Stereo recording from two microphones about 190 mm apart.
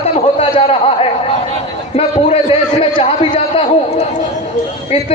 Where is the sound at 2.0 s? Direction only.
30° left (ahead or behind).